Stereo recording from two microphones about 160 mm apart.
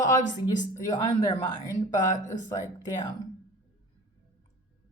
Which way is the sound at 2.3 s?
55° left (ahead or behind).